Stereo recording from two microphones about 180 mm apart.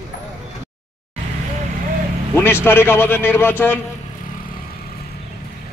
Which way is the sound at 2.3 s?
10° left (ahead or behind).